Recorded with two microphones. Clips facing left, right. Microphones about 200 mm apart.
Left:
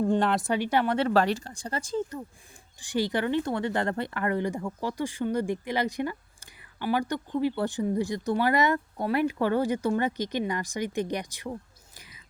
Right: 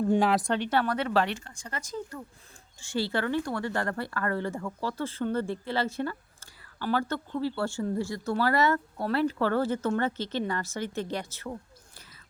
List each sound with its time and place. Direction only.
0.1 s speech: 5° right (ahead or behind)
0.5 s speech: 10° left (ahead or behind)
0.9 s speech: 40° left (ahead or behind); by 11.5 s 15° left (ahead or behind)
11.9 s whispering: 15° left (ahead or behind)